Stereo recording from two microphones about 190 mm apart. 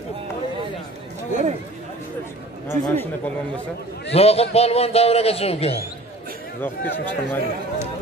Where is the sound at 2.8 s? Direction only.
40° right (ahead or behind).